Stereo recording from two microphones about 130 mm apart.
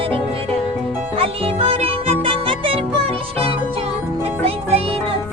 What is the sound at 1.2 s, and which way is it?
Music, 50° right (ahead or behind).